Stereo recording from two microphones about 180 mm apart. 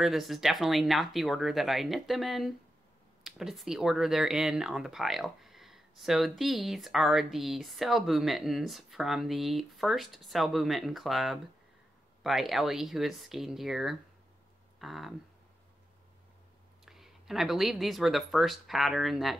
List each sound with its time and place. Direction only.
0.0 s speech: centre (ahead or behind)
16.8 s speech: centre (ahead or behind)